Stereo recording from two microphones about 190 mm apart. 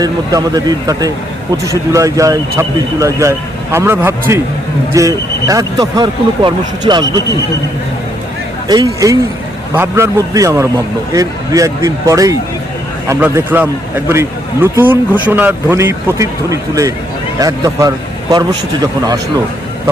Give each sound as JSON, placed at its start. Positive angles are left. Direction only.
{"t": 0.0, "sound": "speech", "side_deg": -20}
{"t": 8.6, "sound": "speech", "side_deg": -20}